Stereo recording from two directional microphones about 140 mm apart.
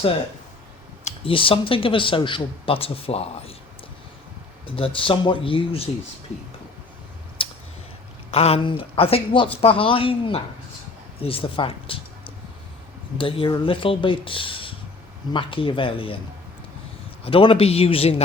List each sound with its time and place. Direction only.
1.0 s speech: 40° left (ahead or behind)
4.6 s speech: 40° left (ahead or behind)
7.4 s a sound: 40° left (ahead or behind)
8.3 s speech: 45° left (ahead or behind)
17.2 s a man's voice: 40° left (ahead or behind)